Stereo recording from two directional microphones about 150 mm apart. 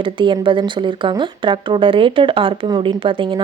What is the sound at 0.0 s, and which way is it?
Speech, 35° right (ahead or behind).